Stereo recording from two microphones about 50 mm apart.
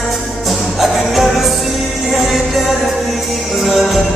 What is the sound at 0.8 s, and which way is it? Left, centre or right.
Music, centre.